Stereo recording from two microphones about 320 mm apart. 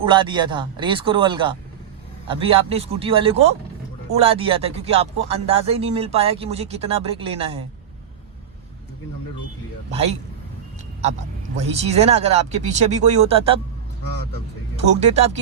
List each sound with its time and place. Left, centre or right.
0.0 s speech: centre
11.8 s speech: centre
14.8 s speech: centre